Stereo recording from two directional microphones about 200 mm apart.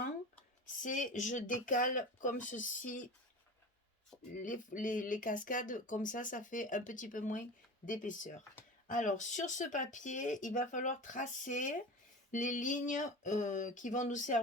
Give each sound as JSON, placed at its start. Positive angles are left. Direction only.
{"t": 0.8, "sound": "speech", "side_deg": 40}
{"t": 4.1, "sound": "a sound", "side_deg": 5}
{"t": 4.4, "sound": "speech", "side_deg": 40}